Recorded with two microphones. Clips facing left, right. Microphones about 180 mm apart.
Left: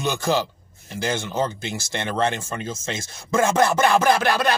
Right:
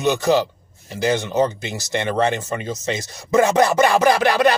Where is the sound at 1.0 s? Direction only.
15° right (ahead or behind).